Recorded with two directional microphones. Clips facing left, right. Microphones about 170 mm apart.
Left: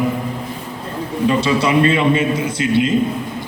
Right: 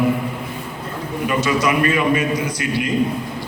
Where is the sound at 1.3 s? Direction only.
30° left (ahead or behind).